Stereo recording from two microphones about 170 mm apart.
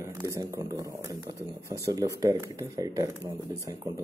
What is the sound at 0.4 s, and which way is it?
Speech, 20° right (ahead or behind).